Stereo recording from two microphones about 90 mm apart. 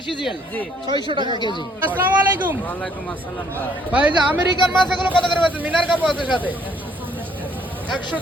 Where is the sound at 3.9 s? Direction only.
15° right (ahead or behind).